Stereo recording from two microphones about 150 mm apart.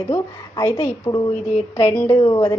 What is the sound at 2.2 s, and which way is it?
Speech, 30° left (ahead or behind).